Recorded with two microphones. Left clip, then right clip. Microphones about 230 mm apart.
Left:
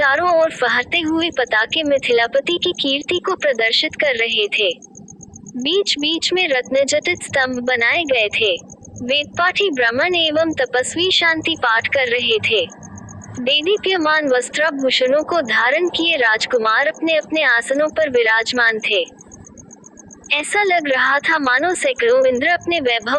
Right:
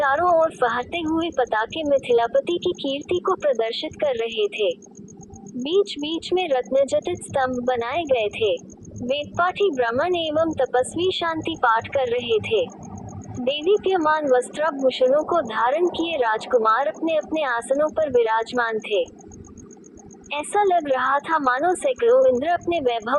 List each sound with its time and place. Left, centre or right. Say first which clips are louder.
0.0 s child singing: left 4 dB; left
1.6 s a woman's voice: left 4 dB; left
20.3 s a woman's voice: left 4 dB; left